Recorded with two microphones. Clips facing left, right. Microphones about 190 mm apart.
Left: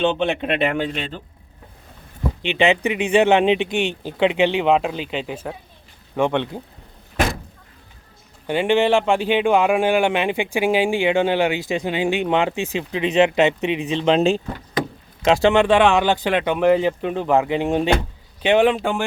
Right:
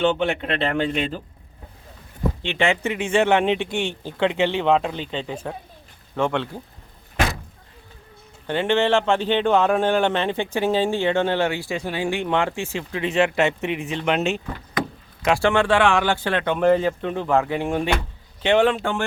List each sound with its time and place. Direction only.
0.0 s speech: 20° left (ahead or behind)
0.9 s speech: centre (ahead or behind)
2.4 s speech: 20° left (ahead or behind)
6.1 s speech: 15° left (ahead or behind)
8.4 s speech: 15° left (ahead or behind)